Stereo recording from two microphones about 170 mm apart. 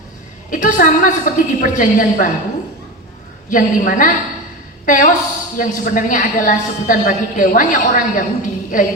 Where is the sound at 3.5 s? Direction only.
50° left (ahead or behind).